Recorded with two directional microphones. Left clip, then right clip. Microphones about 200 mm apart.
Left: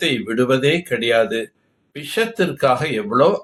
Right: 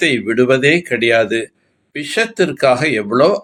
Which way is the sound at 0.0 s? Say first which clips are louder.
Right 5 dB; 35° right (ahead or behind).